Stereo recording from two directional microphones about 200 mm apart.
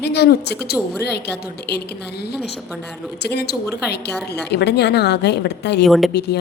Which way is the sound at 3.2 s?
55° left (ahead or behind).